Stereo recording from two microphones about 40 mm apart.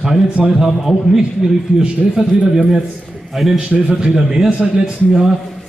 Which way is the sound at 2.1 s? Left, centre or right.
Centre.